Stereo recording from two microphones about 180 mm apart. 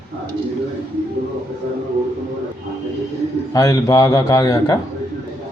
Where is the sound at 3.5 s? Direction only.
20° left (ahead or behind).